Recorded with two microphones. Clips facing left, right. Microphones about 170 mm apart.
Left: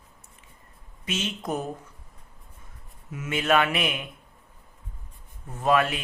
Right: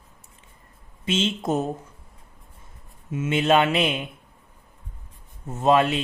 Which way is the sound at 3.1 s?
25° right (ahead or behind).